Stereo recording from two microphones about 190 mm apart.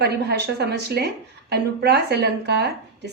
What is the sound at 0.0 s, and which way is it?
A woman's voice, 60° right (ahead or behind).